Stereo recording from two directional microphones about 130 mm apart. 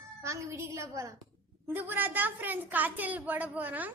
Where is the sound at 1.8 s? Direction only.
15° right (ahead or behind).